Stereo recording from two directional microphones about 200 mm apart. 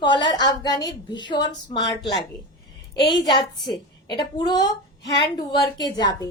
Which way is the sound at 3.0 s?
25° left (ahead or behind).